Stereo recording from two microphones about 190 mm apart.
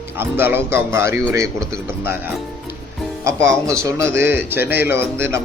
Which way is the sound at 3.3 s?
15° right (ahead or behind).